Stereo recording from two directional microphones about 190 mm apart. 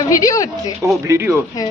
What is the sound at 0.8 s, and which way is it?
Speech, 15° right (ahead or behind).